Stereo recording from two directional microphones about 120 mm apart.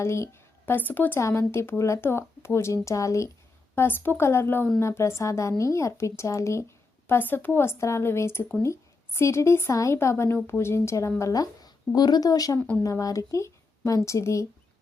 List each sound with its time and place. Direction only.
0.0 s a woman's voice: 20° left (ahead or behind)